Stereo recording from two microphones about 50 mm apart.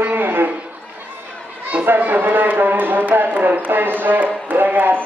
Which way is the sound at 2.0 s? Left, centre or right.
Right.